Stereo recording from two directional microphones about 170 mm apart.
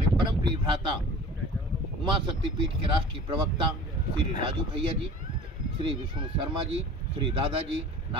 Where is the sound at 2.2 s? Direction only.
30° right (ahead or behind).